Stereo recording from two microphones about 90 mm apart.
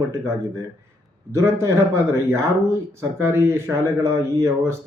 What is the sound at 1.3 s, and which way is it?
A man's voice, 35° right (ahead or behind).